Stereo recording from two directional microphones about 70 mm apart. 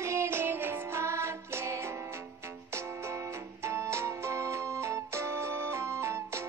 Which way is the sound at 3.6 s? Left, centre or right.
Right.